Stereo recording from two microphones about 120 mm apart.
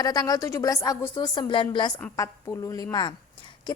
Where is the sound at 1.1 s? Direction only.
40° left (ahead or behind).